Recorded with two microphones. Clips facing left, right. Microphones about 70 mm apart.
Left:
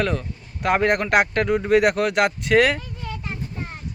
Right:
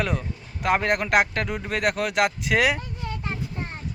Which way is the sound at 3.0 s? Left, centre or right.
Right.